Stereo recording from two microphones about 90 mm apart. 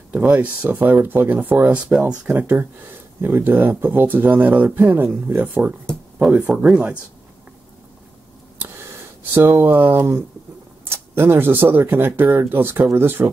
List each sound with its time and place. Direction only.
0.1 s speech: 15° right (ahead or behind)
2.3 s speech: 20° right (ahead or behind)
8.5 s a sound: 25° right (ahead or behind)
10.9 s speech: 25° right (ahead or behind)